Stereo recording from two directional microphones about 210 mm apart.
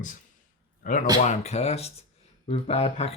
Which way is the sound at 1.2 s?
35° left (ahead or behind).